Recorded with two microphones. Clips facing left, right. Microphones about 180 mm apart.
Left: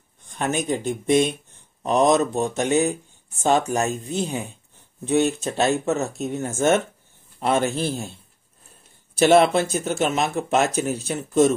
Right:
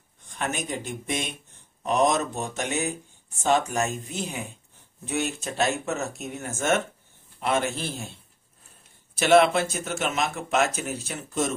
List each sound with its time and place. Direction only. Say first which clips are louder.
0.4 s speech: left 6 dB; 35° left (ahead or behind)
9.2 s speech: left 3 dB; 35° left (ahead or behind)